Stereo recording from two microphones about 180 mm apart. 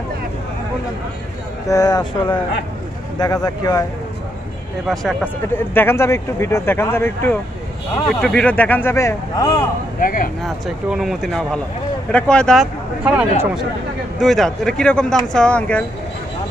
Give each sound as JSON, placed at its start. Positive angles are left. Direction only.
{"t": 1.7, "sound": "speech", "side_deg": 20}
{"t": 4.8, "sound": "speech", "side_deg": 0}
{"t": 5.5, "sound": "speech", "side_deg": 15}
{"t": 9.9, "sound": "speech", "side_deg": 50}
{"t": 10.4, "sound": "speech", "side_deg": 0}
{"t": 13.0, "sound": "speech", "side_deg": -5}